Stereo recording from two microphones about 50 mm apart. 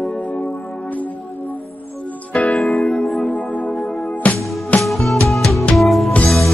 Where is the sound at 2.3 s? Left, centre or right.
Left.